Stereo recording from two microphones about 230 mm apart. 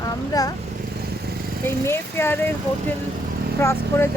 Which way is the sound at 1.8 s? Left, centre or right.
Centre.